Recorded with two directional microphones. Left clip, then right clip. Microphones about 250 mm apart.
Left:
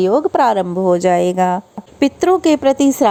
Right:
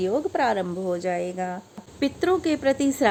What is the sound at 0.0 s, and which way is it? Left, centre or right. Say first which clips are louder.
Speech: left 10 dB; left.